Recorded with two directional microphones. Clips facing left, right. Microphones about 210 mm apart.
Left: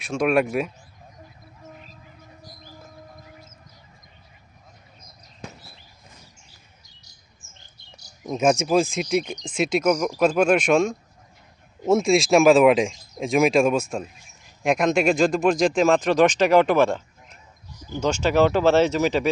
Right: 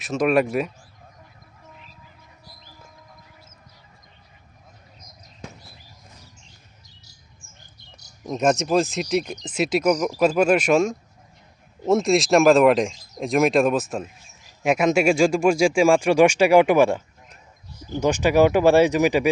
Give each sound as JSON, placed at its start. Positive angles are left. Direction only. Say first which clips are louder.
{"t": 0.0, "sound": "speech", "louder": "right 1 dB", "side_deg": 0}
{"t": 2.4, "sound": "a sound", "louder": "left 4 dB", "side_deg": 45}
{"t": 8.2, "sound": "speech", "louder": "even", "side_deg": 5}